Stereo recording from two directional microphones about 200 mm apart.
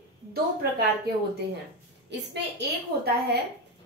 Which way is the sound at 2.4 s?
55° right (ahead or behind).